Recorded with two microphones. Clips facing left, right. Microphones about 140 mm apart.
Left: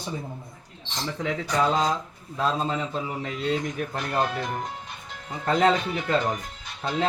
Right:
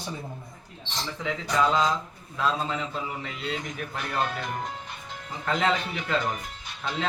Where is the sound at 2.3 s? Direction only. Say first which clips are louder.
Left 2 dB; 35° left (ahead or behind).